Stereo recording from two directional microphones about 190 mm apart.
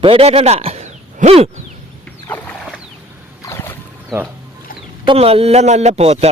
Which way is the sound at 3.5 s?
10° left (ahead or behind).